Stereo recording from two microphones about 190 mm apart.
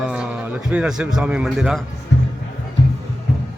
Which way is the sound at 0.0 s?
5° right (ahead or behind).